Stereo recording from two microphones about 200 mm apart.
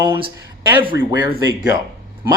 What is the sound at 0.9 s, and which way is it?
Speech, 55° left (ahead or behind).